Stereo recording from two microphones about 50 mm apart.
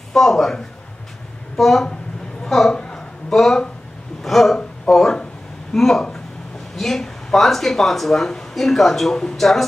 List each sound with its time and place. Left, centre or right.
0.1 s a woman's voice: centre
2.8 s a sound: centre
3.3 s speech: centre